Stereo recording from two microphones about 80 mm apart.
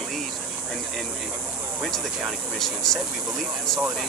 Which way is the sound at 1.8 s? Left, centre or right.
Centre.